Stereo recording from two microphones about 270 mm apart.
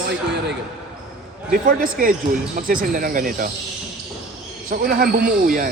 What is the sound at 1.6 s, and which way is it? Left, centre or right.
Speech, right.